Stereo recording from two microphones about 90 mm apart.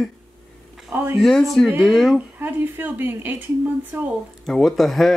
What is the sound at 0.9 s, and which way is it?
Speech, 30° right (ahead or behind).